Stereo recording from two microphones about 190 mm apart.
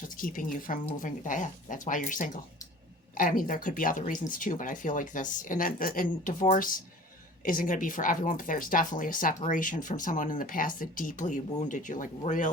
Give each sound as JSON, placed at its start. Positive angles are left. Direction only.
{"t": 0.2, "sound": "speech", "side_deg": 45}